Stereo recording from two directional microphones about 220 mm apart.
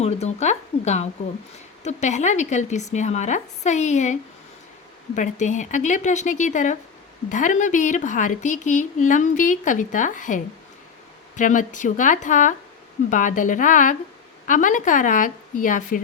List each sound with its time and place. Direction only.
0.0 s a woman's voice: 30° left (ahead or behind)